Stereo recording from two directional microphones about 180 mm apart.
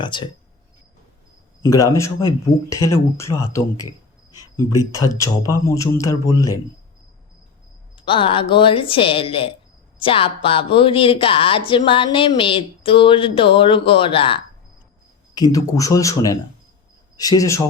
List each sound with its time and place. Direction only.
0.0 s speech: 25° left (ahead or behind)
1.6 s speech: 20° left (ahead or behind)
4.9 s speech: 15° left (ahead or behind)
7.9 s speech: 30° left (ahead or behind)
15.4 s speech: 20° left (ahead or behind)